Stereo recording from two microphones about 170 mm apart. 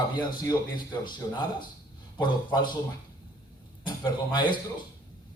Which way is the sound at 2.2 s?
25° left (ahead or behind).